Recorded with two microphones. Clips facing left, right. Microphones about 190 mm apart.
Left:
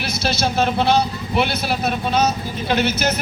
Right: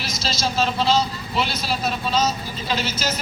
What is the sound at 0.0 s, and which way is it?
Speech, 60° left (ahead or behind).